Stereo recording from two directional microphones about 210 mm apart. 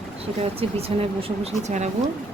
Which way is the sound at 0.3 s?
30° right (ahead or behind).